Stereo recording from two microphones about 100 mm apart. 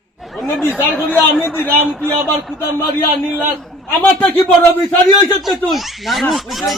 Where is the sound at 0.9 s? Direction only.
15° left (ahead or behind).